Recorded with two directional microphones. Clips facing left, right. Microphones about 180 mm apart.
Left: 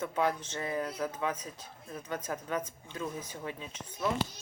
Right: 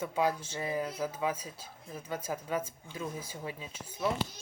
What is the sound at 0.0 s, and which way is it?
Speech, 10° right (ahead or behind).